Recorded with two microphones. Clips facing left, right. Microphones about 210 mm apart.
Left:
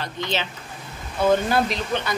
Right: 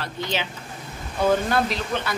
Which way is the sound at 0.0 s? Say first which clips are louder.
Left 1 dB; 10° right (ahead or behind).